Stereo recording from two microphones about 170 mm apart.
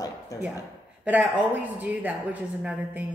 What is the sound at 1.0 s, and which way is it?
A woman's voice, 10° right (ahead or behind).